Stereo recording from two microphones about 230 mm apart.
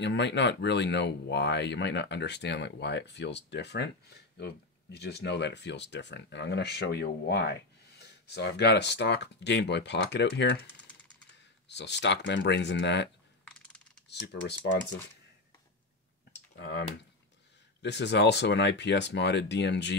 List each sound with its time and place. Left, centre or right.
0.0 s speech: left
11.7 s speech: left
13.5 s computer keyboard: centre
14.0 s speech: left
16.5 s speech: left
17.8 s speech: left